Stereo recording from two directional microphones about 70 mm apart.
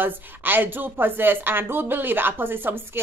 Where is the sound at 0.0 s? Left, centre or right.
Right.